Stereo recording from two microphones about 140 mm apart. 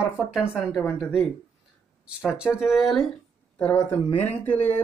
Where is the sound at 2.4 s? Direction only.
5° right (ahead or behind).